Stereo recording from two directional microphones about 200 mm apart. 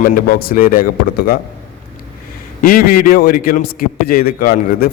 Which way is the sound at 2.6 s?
45° left (ahead or behind).